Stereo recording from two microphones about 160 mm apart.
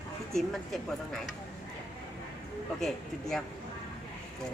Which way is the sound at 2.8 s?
Centre (ahead or behind).